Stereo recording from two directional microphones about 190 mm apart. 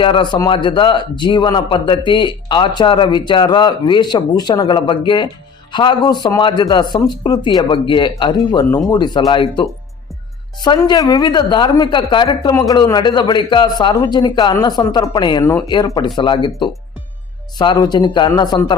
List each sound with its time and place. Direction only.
0.0 s a man's voice: 25° left (ahead or behind)